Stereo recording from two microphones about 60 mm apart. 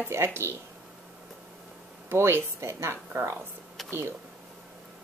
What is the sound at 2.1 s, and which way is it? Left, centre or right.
Speech, right.